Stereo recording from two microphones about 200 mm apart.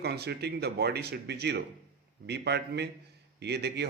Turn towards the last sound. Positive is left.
turn(degrees=-55)  # may be behind; listen again after turning